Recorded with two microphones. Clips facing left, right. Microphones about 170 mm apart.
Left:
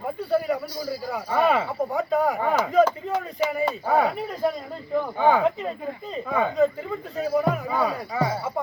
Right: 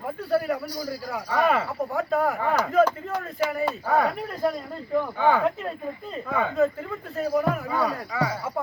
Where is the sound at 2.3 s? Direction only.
15° left (ahead or behind).